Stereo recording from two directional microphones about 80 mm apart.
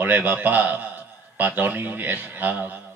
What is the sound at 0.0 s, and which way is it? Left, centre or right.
A man's voice, right.